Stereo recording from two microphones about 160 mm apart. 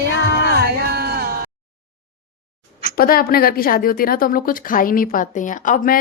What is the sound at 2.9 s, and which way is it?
A woman's voice, 70° left (ahead or behind).